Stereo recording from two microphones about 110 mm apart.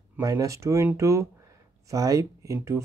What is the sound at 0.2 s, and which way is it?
Speech, 30° right (ahead or behind).